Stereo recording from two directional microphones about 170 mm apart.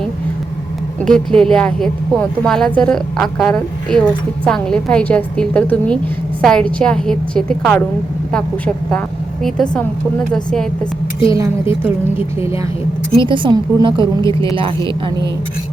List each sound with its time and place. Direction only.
1.0 s a woman's voice: 5° left (ahead or behind)
13.2 s a woman's voice: 30° right (ahead or behind)